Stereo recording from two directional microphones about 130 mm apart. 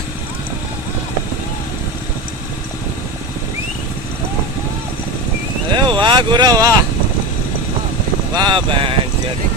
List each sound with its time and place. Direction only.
5.7 s vehicle: 35° right (ahead or behind)
8.4 s speech: 35° right (ahead or behind)